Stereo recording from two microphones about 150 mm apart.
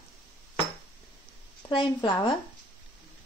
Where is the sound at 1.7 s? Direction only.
35° left (ahead or behind).